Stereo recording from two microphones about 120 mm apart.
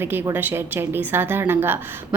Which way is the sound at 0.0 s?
20° right (ahead or behind).